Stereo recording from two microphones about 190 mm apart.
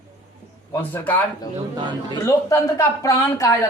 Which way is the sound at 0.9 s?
10° left (ahead or behind).